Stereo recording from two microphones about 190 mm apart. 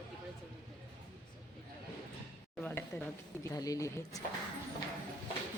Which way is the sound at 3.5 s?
20° left (ahead or behind).